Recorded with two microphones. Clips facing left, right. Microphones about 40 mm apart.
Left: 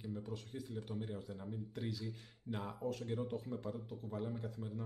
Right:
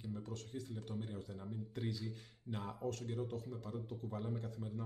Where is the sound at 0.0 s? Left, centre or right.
Centre.